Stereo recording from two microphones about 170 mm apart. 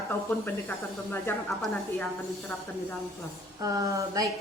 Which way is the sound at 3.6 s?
20° right (ahead or behind).